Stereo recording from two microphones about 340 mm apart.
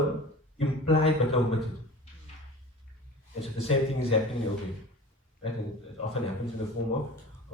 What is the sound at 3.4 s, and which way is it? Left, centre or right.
Speech, centre.